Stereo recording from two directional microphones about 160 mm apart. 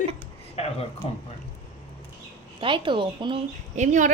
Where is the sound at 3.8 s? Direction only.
55° right (ahead or behind).